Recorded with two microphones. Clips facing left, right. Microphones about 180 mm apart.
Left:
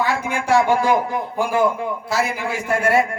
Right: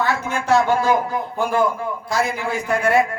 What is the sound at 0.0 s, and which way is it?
Speech, 10° left (ahead or behind).